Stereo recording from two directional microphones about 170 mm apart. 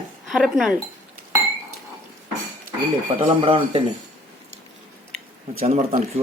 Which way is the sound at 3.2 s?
35° right (ahead or behind).